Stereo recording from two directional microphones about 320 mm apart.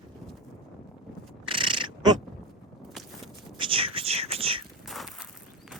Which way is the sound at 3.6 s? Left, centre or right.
Centre.